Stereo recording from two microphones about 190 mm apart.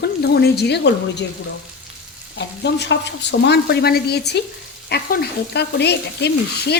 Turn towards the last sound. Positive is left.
turn(degrees=60)  # may be behind; listen again after turning